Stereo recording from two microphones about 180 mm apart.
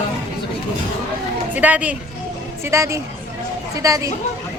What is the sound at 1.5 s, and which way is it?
Speech, 10° right (ahead or behind).